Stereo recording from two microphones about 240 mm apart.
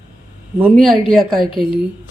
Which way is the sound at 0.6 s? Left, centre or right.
Centre.